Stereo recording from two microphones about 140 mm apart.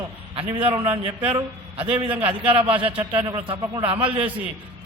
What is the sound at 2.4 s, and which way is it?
A man's voice, 40° right (ahead or behind).